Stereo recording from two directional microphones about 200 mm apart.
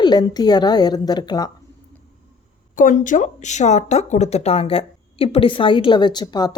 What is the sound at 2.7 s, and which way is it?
A woman's voice, 40° left (ahead or behind).